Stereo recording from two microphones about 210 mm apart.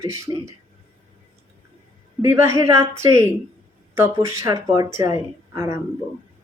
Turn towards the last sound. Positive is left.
turn(degrees=-15)  # may be behind; listen again after turning